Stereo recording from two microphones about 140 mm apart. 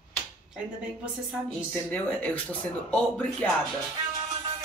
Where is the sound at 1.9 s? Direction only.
10° left (ahead or behind).